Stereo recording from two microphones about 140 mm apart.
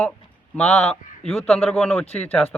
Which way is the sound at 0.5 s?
10° left (ahead or behind).